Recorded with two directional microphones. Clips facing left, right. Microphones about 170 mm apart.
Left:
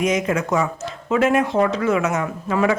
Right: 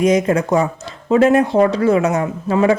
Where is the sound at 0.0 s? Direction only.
35° right (ahead or behind).